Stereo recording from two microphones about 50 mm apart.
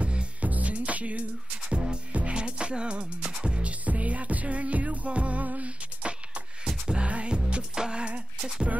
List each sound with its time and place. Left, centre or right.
0.0 s music: right